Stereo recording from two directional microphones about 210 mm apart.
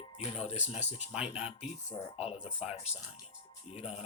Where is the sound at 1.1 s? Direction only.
5° right (ahead or behind).